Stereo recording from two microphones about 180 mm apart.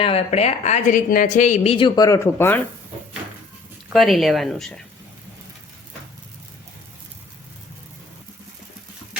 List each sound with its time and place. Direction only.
0.0 s a woman's voice: 35° left (ahead or behind); by 2.6 s 15° left (ahead or behind)
3.8 s speech: centre (ahead or behind)